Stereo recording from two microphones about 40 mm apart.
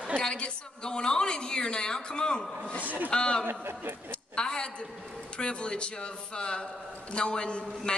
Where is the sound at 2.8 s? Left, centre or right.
Right.